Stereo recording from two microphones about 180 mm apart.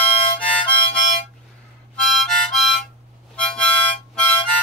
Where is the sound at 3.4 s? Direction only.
5° left (ahead or behind).